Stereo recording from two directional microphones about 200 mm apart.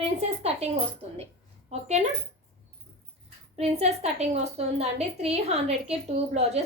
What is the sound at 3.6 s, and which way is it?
A woman's voice, 30° right (ahead or behind).